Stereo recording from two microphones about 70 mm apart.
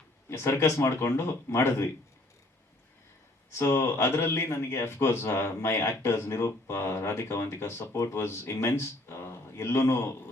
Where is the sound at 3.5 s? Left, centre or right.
Left.